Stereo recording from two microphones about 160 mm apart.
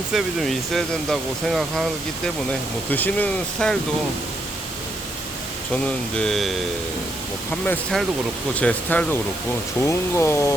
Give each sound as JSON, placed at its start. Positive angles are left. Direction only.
{"t": 0.1, "sound": "speech", "side_deg": 0}
{"t": 5.7, "sound": "speech", "side_deg": 5}